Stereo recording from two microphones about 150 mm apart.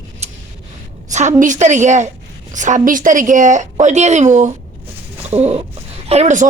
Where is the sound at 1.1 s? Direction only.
55° right (ahead or behind).